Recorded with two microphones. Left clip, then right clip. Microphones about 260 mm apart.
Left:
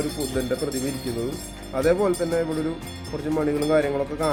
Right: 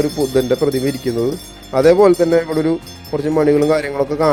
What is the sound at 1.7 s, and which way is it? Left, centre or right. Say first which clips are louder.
Speech: right 11 dB; right.